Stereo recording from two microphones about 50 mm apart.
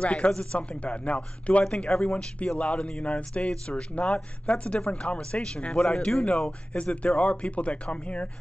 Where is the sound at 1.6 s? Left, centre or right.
Centre.